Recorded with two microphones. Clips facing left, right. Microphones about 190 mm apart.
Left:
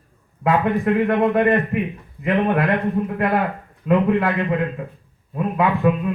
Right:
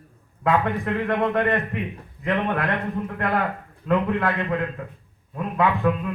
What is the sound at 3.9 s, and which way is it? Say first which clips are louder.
Speech: left 4 dB; 15° left (ahead or behind).